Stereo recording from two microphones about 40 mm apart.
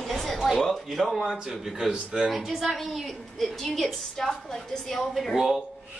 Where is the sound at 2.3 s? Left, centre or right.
Centre.